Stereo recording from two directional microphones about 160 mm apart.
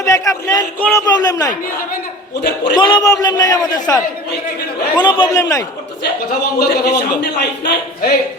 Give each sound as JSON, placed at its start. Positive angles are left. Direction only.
{"t": 0.0, "sound": "a sound", "side_deg": 20}
{"t": 0.8, "sound": "a man's voice", "side_deg": 10}
{"t": 1.0, "sound": "a man's voice", "side_deg": 25}
{"t": 2.7, "sound": "a man's voice", "side_deg": 30}
{"t": 4.9, "sound": "a man's voice", "side_deg": 30}
{"t": 6.0, "sound": "a man's voice", "side_deg": 80}